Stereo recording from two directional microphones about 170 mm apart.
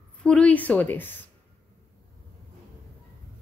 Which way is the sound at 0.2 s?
5° left (ahead or behind).